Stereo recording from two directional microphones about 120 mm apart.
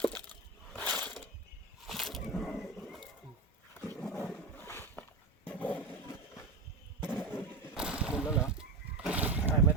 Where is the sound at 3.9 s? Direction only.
20° left (ahead or behind).